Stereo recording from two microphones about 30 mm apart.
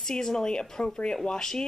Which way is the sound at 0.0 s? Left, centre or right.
Centre.